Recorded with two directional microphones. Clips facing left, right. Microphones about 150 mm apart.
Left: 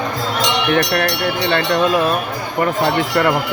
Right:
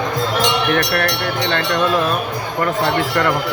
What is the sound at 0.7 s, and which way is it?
Speech, 15° left (ahead or behind).